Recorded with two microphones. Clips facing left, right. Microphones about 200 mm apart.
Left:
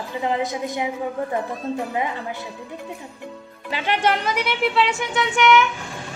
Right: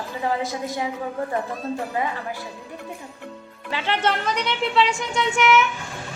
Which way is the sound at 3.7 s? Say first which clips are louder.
Left 2 dB; 15° left (ahead or behind).